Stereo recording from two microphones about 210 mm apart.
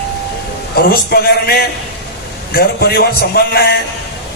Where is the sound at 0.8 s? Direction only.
50° left (ahead or behind).